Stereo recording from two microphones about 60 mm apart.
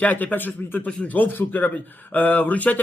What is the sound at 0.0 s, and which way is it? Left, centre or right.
A man's voice, left.